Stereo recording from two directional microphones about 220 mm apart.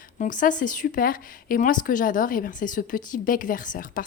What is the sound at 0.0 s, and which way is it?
Speech, 35° left (ahead or behind).